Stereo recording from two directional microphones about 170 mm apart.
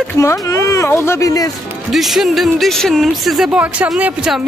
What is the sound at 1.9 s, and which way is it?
Speech, centre (ahead or behind).